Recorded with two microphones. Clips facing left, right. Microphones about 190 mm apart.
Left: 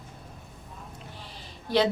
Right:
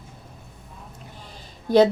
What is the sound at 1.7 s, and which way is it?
Speech, 45° right (ahead or behind).